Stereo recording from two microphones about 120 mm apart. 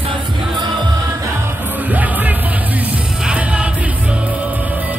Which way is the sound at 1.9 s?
15° right (ahead or behind).